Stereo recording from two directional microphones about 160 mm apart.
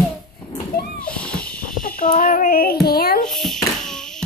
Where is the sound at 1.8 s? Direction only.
60° left (ahead or behind).